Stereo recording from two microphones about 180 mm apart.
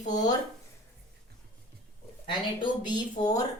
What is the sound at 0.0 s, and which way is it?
Speech, 40° left (ahead or behind).